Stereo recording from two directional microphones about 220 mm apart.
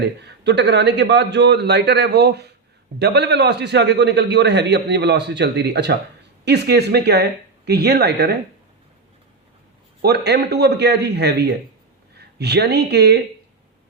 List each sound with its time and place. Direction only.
0.0 s a man's voice: 50° right (ahead or behind)
10.0 s a man's voice: 50° right (ahead or behind)